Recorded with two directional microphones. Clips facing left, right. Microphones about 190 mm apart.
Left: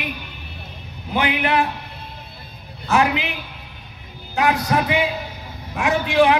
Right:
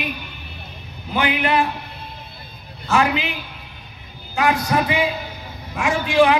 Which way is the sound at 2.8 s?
15° left (ahead or behind).